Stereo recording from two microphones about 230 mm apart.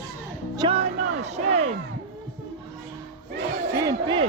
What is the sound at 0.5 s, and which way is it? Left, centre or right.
Speech, right.